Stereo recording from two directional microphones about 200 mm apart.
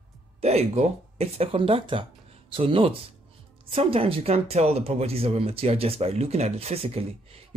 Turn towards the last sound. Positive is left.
turn(degrees=-30)  # may be behind; listen again after turning